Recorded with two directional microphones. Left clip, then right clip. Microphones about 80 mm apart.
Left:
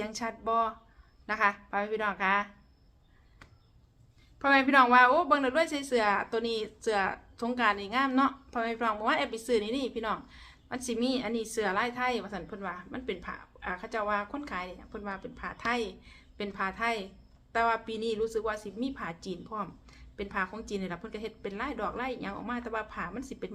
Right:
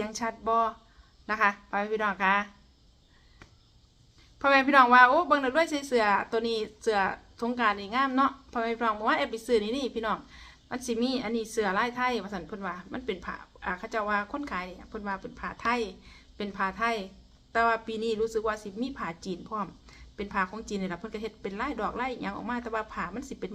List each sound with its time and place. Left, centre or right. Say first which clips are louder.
0.0 s a woman's voice: right 3 dB; right
4.4 s a woman's voice: right 2 dB; right
4.7 s a woman's voice: right 3 dB; right